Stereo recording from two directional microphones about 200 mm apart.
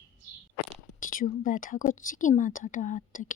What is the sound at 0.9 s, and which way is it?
Speech, 45° left (ahead or behind).